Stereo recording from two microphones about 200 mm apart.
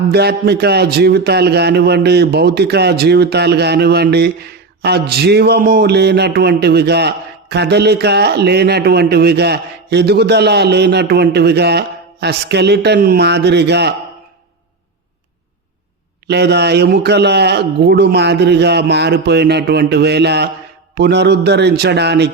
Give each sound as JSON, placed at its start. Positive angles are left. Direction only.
{"t": 0.1, "sound": "a man's voice", "side_deg": -55}
{"t": 16.2, "sound": "a man's voice", "side_deg": -55}